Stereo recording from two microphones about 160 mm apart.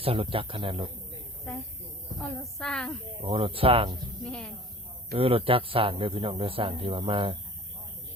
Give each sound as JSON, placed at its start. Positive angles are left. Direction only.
{"t": 0.0, "sound": "speech", "side_deg": -35}
{"t": 1.5, "sound": "speech", "side_deg": 5}
{"t": 3.2, "sound": "speech", "side_deg": -35}
{"t": 4.2, "sound": "speech", "side_deg": 5}
{"t": 5.1, "sound": "speech", "side_deg": -35}